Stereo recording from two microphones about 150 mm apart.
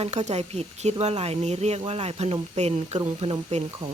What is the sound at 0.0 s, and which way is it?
Speech, 50° right (ahead or behind).